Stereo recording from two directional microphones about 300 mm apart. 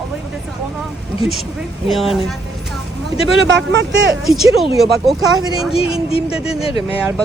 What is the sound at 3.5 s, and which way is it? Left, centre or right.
Speech, right.